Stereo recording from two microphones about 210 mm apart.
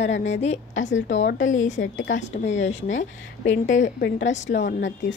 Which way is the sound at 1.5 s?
35° left (ahead or behind).